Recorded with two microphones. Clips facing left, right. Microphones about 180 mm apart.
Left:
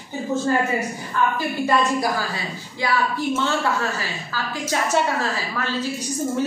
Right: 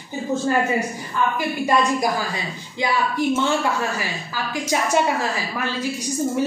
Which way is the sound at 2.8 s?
15° right (ahead or behind).